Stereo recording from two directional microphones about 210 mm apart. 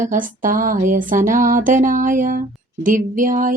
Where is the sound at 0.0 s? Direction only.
40° right (ahead or behind).